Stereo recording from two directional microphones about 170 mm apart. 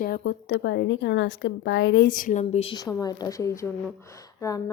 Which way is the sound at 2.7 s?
20° left (ahead or behind).